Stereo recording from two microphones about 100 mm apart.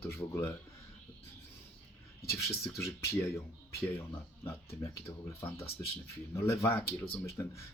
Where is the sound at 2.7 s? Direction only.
30° left (ahead or behind).